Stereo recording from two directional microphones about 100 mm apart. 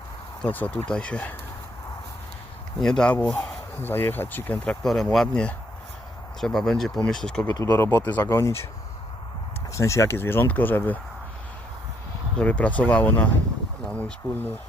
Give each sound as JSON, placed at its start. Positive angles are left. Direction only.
{"t": 0.4, "sound": "speech", "side_deg": 15}
{"t": 2.8, "sound": "speech", "side_deg": 5}
{"t": 4.8, "sound": "speech", "side_deg": 5}
{"t": 7.6, "sound": "speech", "side_deg": 25}
{"t": 9.7, "sound": "speech", "side_deg": 30}
{"t": 12.4, "sound": "speech", "side_deg": 10}